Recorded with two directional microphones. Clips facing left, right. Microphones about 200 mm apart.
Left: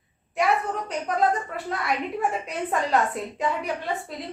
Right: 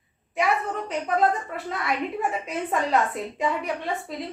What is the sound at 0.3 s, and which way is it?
A woman's voice, centre (ahead or behind).